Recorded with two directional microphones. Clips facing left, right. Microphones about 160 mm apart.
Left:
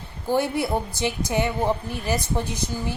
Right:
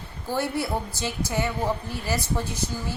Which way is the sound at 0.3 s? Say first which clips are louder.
Left 4 dB; 15° left (ahead or behind).